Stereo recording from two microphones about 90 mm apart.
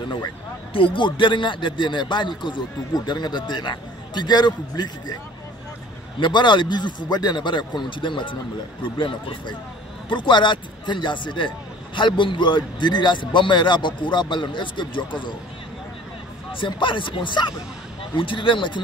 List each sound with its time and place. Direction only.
0.7 s a man's voice: 70° left (ahead or behind); by 5.1 s 55° left (ahead or behind)
6.1 s a man's voice: 60° left (ahead or behind)
16.5 s a man's voice: 65° left (ahead or behind)